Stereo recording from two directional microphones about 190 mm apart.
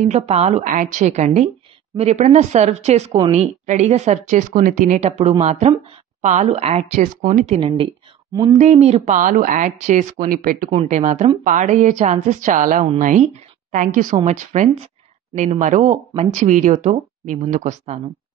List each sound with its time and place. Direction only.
0.0 s a woman's voice: 35° right (ahead or behind)
10.7 s a woman's voice: 35° right (ahead or behind)